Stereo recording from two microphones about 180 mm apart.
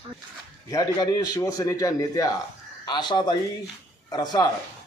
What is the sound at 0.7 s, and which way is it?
Speech, 20° left (ahead or behind).